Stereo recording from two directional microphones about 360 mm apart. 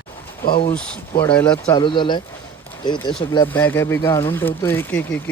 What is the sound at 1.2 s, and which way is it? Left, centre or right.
Speech, centre.